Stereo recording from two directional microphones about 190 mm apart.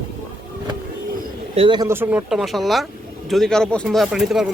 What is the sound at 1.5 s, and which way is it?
Speech, 25° right (ahead or behind).